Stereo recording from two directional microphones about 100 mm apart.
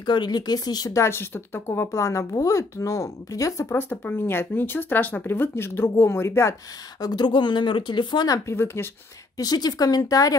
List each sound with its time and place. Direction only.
0.0 s speech: 50° left (ahead or behind)
1.0 s speech: 25° left (ahead or behind)
7.0 s speech: 45° left (ahead or behind)
8.5 s speech: 25° left (ahead or behind)
9.4 s speech: 40° left (ahead or behind)